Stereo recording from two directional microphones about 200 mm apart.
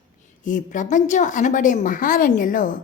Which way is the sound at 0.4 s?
40° left (ahead or behind).